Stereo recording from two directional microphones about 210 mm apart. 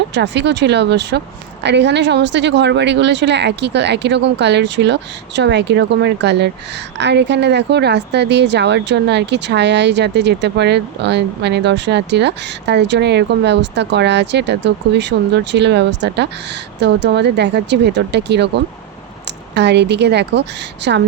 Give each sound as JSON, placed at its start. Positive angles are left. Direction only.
{"t": 0.1, "sound": "a woman's voice", "side_deg": -55}